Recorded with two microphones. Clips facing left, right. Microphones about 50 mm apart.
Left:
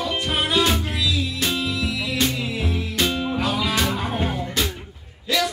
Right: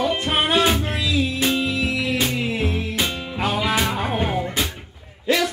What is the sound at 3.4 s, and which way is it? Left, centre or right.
Music, right.